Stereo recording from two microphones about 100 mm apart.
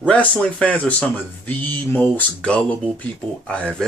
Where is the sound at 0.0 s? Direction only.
15° left (ahead or behind).